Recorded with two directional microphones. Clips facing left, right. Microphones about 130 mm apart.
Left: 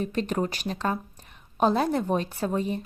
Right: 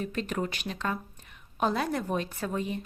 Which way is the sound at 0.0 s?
35° left (ahead or behind).